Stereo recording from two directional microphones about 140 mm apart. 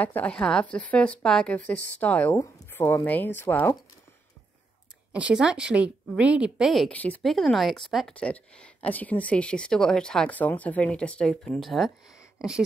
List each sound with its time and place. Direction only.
0.0 s speech: 10° left (ahead or behind)
2.3 s speech: 25° left (ahead or behind)
5.1 s speech: 10° right (ahead or behind)